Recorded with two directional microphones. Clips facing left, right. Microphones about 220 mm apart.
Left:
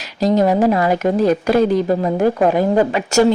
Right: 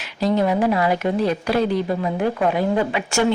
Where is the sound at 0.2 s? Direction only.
40° left (ahead or behind).